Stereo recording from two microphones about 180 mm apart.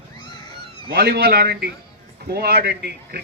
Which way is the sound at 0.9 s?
60° right (ahead or behind).